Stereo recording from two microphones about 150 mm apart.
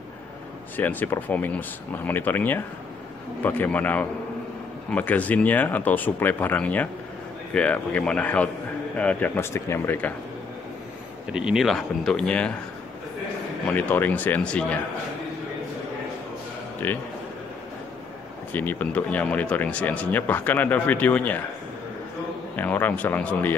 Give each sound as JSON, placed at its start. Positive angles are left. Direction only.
{"t": 0.7, "sound": "speech", "side_deg": 10}
{"t": 11.2, "sound": "a man's voice", "side_deg": -5}
{"t": 13.7, "sound": "speech", "side_deg": 10}
{"t": 16.8, "sound": "speech", "side_deg": 10}
{"t": 18.5, "sound": "speech", "side_deg": 10}
{"t": 22.6, "sound": "speech", "side_deg": 10}